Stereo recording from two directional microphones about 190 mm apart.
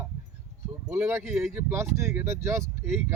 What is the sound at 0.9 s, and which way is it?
Speech, 10° right (ahead or behind).